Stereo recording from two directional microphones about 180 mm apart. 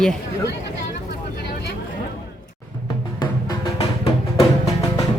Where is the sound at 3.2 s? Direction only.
25° left (ahead or behind).